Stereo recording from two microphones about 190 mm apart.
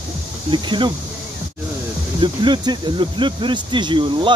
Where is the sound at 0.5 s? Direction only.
25° right (ahead or behind).